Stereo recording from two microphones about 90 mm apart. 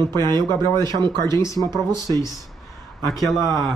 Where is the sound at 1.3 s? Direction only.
35° left (ahead or behind).